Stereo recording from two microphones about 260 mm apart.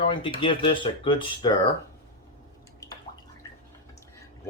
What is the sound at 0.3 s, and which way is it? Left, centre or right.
Speech, centre.